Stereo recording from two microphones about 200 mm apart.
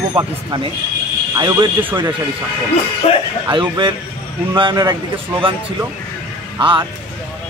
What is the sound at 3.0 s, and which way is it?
Speech, 30° left (ahead or behind).